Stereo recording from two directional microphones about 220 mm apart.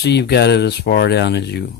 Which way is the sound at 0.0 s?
50° left (ahead or behind).